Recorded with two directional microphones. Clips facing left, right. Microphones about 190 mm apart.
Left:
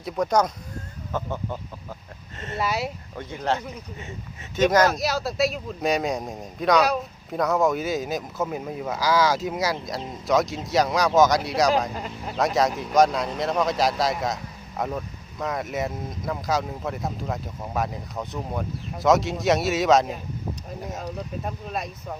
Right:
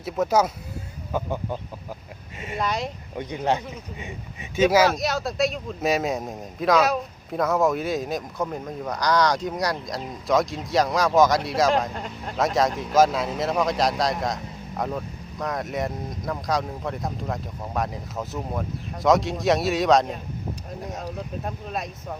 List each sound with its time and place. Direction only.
0.0 s speech: 5° right (ahead or behind)
2.6 s speech: 5° left (ahead or behind)
3.2 s speech: 15° right (ahead or behind); by 21.8 s centre (ahead or behind)